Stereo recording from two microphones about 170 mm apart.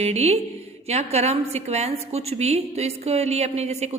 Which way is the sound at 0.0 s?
40° right (ahead or behind).